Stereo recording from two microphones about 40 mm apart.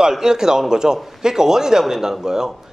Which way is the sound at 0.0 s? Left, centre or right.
Centre.